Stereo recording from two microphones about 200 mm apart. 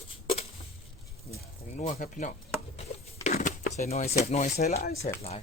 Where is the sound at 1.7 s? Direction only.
40° left (ahead or behind).